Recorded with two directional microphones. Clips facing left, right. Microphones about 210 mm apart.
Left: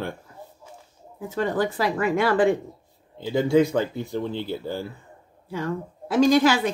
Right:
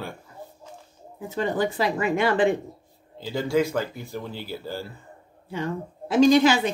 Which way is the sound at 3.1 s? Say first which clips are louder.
Left 4 dB; 20° left (ahead or behind).